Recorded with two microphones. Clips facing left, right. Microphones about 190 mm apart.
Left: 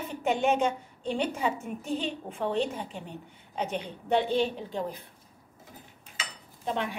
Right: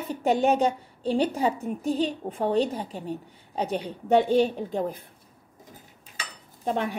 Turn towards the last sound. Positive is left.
turn(degrees=-45)  # may be behind; listen again after turning